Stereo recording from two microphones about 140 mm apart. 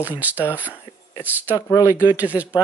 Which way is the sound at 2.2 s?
10° right (ahead or behind).